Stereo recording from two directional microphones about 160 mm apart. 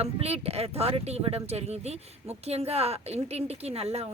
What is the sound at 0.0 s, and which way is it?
Speech, 40° right (ahead or behind).